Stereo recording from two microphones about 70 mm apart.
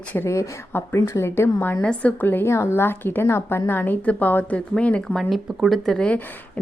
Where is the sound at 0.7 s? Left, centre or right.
Left.